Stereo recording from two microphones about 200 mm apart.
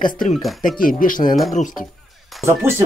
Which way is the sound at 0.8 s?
45° left (ahead or behind).